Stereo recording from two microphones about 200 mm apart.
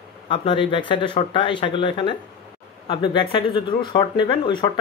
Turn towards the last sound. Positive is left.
turn(degrees=25)  # may be behind; listen again after turning